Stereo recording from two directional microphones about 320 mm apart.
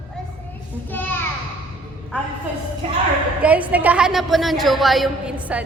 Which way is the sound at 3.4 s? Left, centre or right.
Centre.